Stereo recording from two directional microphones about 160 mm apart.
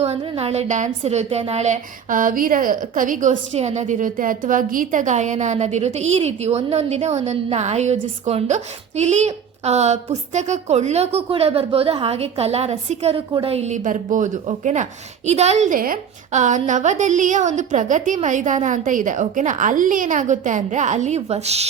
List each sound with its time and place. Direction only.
0.0 s a woman's voice: 40° right (ahead or behind)